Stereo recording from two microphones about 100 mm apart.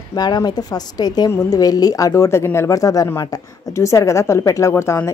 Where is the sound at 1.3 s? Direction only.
30° left (ahead or behind).